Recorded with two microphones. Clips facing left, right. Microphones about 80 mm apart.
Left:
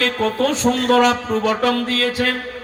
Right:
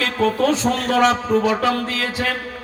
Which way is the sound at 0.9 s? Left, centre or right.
Right.